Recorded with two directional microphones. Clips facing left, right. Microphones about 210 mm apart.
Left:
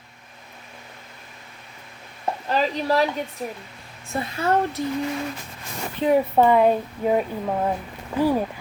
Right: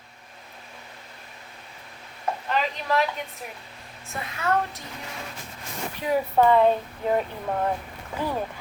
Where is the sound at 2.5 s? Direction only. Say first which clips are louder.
Left 4 dB; 35° left (ahead or behind).